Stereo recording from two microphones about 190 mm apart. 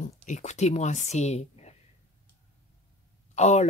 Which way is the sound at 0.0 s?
40° left (ahead or behind).